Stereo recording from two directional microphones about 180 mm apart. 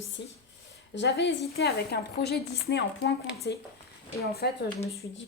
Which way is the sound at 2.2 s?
65° left (ahead or behind).